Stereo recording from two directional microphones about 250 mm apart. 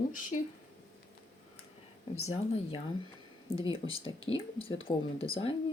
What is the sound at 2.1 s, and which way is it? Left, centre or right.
Speech, left.